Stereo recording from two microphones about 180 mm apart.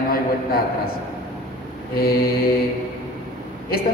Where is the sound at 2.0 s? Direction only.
55° left (ahead or behind).